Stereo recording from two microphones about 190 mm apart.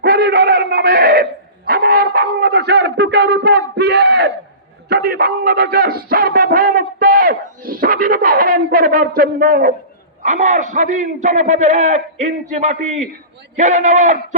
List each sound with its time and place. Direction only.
0.0 s a sound: 55° right (ahead or behind)
3.8 s crowd: 60° right (ahead or behind)
4.9 s music: 55° right (ahead or behind)
10.2 s a man's voice: 40° right (ahead or behind)